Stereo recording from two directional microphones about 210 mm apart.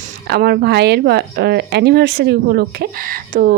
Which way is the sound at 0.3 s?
50° right (ahead or behind).